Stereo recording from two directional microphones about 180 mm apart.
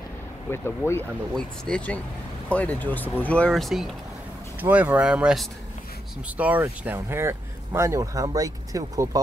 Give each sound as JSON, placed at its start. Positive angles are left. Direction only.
{"t": 0.5, "sound": "speech", "side_deg": 15}